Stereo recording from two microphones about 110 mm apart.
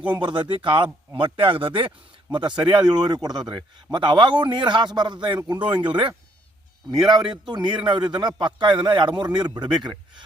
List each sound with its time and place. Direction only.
0.1 s a man's voice: 45° right (ahead or behind)
7.3 s a man's voice: 45° right (ahead or behind)